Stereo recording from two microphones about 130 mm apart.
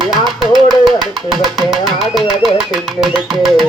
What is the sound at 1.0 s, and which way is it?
Speech, 35° right (ahead or behind).